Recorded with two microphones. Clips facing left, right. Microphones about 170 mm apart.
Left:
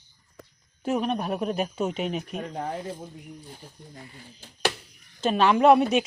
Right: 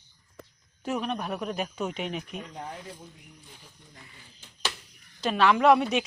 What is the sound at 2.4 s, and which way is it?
Speech, 50° left (ahead or behind).